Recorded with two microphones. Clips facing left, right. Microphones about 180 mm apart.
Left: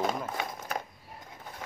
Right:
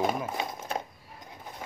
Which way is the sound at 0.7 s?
25° right (ahead or behind).